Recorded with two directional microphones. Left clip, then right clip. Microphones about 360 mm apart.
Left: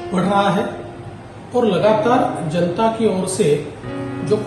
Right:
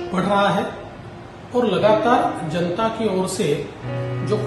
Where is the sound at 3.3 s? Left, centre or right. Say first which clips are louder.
Left 5 dB; centre.